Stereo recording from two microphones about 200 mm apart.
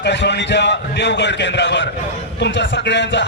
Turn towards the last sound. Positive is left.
turn(degrees=60)  # may be behind; listen again after turning